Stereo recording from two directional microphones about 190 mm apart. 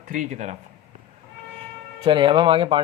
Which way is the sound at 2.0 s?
25° right (ahead or behind).